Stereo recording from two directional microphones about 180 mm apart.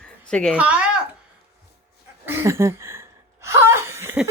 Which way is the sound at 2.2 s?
15° right (ahead or behind).